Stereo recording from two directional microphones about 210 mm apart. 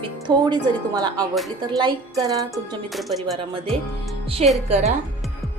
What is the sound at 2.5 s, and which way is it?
Speech, centre (ahead or behind).